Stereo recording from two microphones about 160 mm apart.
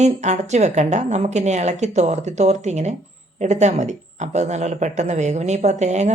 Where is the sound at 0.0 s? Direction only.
45° right (ahead or behind).